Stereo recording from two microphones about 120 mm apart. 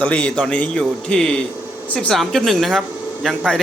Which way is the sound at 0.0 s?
10° left (ahead or behind).